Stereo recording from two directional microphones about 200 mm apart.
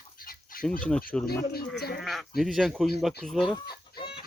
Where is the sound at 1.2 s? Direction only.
50° left (ahead or behind).